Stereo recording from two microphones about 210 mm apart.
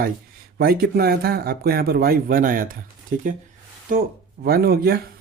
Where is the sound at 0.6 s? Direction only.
45° right (ahead or behind).